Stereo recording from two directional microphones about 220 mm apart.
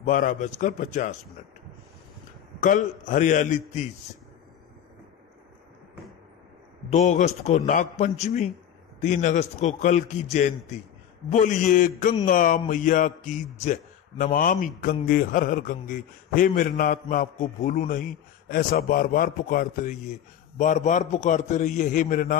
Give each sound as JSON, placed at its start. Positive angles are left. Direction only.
{"t": 0.0, "sound": "a man's voice", "side_deg": 35}
{"t": 2.6, "sound": "a man's voice", "side_deg": 35}
{"t": 6.9, "sound": "a man's voice", "side_deg": 35}
{"t": 11.3, "sound": "a man's voice", "side_deg": 35}